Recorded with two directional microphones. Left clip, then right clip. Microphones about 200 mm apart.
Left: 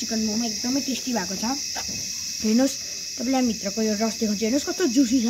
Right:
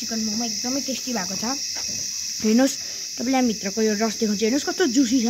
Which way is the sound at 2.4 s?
35° right (ahead or behind).